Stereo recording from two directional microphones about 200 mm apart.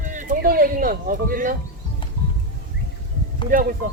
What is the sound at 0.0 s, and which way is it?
Speech, 40° right (ahead or behind).